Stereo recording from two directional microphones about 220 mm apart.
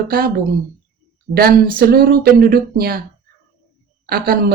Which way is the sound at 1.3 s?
45° right (ahead or behind).